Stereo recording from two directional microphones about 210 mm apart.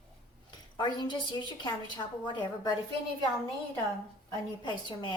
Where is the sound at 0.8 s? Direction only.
20° left (ahead or behind).